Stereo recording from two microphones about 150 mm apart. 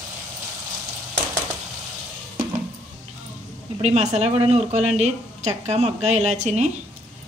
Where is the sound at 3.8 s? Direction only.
50° right (ahead or behind).